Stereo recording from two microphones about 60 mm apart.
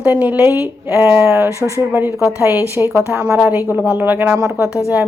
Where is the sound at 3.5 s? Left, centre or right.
Right.